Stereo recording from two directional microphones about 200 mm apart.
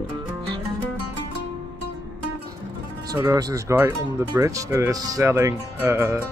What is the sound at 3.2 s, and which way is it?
Speech, 15° right (ahead or behind).